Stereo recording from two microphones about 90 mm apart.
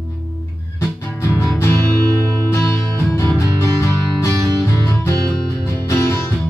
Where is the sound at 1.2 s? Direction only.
30° left (ahead or behind).